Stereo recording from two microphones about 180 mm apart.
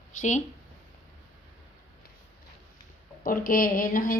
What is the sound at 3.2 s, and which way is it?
Speech, 50° left (ahead or behind).